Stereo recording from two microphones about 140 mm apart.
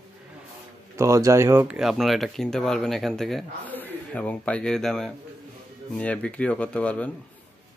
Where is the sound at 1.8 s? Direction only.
Centre (ahead or behind).